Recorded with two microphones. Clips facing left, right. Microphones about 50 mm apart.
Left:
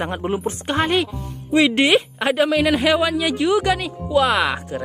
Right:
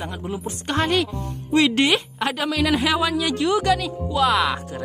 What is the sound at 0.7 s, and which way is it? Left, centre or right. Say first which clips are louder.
Speech: left 1 dB; centre.